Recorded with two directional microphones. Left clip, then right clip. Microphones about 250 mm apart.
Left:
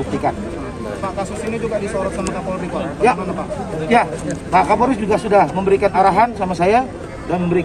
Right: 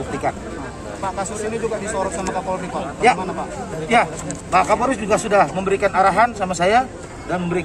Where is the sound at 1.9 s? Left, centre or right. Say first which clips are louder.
Left 1 dB; right.